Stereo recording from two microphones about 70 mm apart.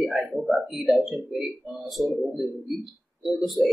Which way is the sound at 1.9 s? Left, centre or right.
Centre.